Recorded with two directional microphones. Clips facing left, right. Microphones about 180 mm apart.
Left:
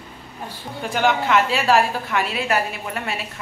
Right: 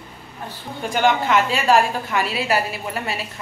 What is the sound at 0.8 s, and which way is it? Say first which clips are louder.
A woman's voice: right 1 dB; centre (ahead or behind).